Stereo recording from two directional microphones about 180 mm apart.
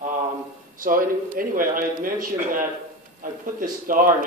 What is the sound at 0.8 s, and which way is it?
A man's voice, 50° right (ahead or behind).